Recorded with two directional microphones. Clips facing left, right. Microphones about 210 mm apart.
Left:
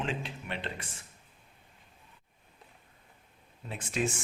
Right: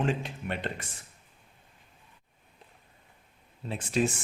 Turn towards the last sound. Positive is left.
turn(degrees=-35)  # may be behind; listen again after turning